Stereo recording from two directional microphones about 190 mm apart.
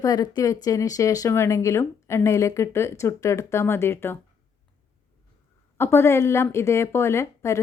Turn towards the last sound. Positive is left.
turn(degrees=15)  # may be behind; listen again after turning